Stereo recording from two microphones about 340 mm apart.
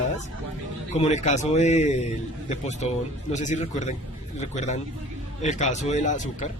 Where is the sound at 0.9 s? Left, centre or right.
Centre.